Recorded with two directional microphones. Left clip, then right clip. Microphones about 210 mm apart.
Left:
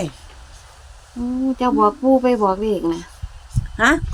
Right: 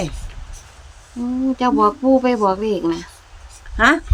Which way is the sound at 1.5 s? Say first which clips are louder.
Right 1 dB; centre (ahead or behind).